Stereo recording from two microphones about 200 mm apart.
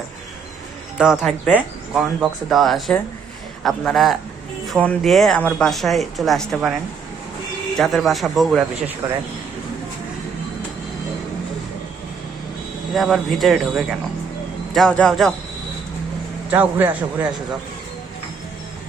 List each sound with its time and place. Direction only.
0.9 s speech: 5° right (ahead or behind)
7.8 s speech: centre (ahead or behind)
9.0 s a man's voice: 15° right (ahead or behind)
12.9 s speech: centre (ahead or behind)
16.5 s a man's voice: 10° right (ahead or behind)